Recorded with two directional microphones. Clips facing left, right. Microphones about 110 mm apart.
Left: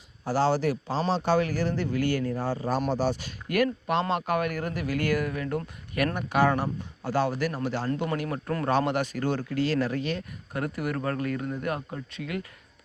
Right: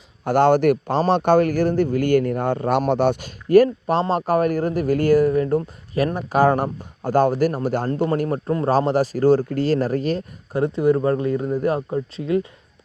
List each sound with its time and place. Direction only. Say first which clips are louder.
0.3 s speech: right 9 dB; 60° right (ahead or behind)
3.5 s speech: right 10 dB; 35° right (ahead or behind)
6.1 s speech: right 7 dB; 40° right (ahead or behind)
8.4 s speech: right 5 dB; 25° right (ahead or behind)